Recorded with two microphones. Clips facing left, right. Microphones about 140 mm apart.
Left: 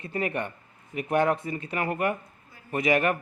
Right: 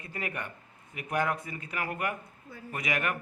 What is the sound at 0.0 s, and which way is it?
A man's voice, 30° left (ahead or behind).